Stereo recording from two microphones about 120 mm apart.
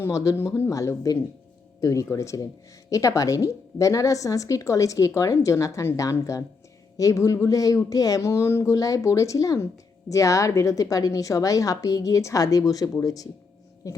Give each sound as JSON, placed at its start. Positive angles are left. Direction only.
{"t": 0.0, "sound": "a woman's voice", "side_deg": 25}